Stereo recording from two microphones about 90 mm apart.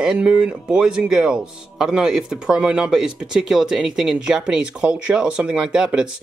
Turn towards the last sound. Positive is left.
turn(degrees=-10)  # may be behind; listen again after turning